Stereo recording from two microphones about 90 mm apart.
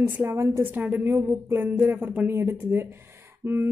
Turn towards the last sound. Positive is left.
turn(degrees=-25)  # may be behind; listen again after turning